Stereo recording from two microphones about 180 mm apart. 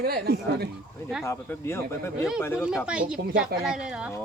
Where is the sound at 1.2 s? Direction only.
15° left (ahead or behind).